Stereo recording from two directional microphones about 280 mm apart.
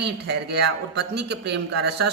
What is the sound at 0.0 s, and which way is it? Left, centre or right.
A man's voice, right.